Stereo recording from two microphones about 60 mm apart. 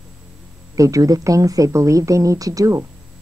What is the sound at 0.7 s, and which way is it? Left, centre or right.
Speech, right.